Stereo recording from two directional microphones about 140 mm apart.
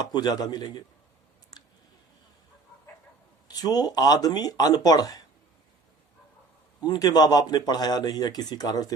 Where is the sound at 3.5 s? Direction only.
30° left (ahead or behind).